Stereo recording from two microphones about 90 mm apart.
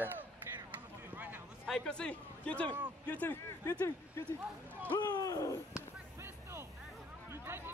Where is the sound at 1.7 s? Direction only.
10° left (ahead or behind).